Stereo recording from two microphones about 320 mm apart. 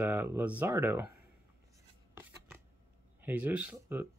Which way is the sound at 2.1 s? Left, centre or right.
Centre.